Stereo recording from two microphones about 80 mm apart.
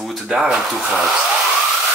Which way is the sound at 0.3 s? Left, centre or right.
Centre.